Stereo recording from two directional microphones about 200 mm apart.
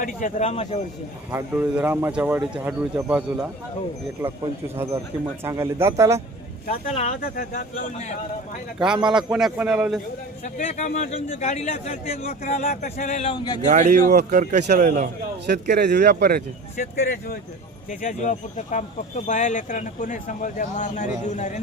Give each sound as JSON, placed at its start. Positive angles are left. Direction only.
{"t": 0.0, "sound": "speech", "side_deg": 40}
{"t": 1.3, "sound": "speech", "side_deg": -10}
{"t": 5.4, "sound": "speech", "side_deg": -15}
{"t": 6.7, "sound": "speech", "side_deg": 35}
{"t": 8.8, "sound": "a man's voice", "side_deg": -5}
{"t": 10.4, "sound": "speech", "side_deg": 35}
{"t": 13.7, "sound": "speech", "side_deg": -40}
{"t": 14.8, "sound": "speech", "side_deg": -50}
{"t": 16.7, "sound": "speech", "side_deg": 40}